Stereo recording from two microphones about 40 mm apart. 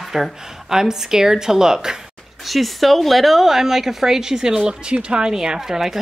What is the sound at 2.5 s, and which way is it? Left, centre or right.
A woman's voice, centre.